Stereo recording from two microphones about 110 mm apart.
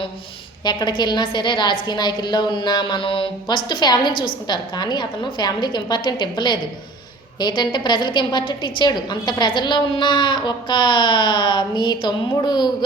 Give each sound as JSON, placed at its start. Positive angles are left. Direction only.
{"t": 0.6, "sound": "a woman's voice", "side_deg": 40}